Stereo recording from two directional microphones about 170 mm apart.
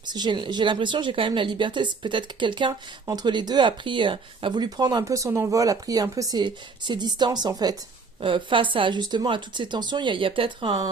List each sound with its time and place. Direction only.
0.0 s speech: 25° right (ahead or behind)